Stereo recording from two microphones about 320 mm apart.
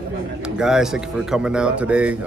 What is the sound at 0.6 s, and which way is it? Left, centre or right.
Speech, centre.